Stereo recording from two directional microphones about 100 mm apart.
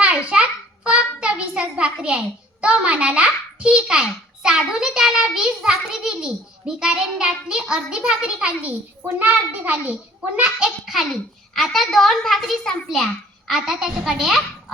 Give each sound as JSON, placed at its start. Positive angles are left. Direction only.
{"t": 0.9, "sound": "a child's voice", "side_deg": -10}
{"t": 10.8, "sound": "a child's voice", "side_deg": 0}